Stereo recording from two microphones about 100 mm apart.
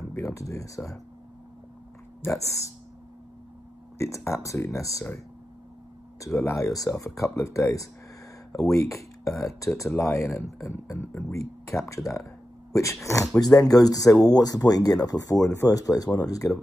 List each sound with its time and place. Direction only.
0.1 s speech: 30° left (ahead or behind)
2.3 s speech: 30° left (ahead or behind)
4.0 s speech: 30° left (ahead or behind)
6.2 s speech: 30° left (ahead or behind)